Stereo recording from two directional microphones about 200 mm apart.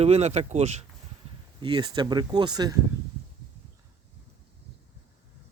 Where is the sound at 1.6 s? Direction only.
20° right (ahead or behind).